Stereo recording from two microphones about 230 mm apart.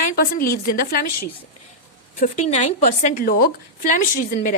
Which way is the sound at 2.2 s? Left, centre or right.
Left.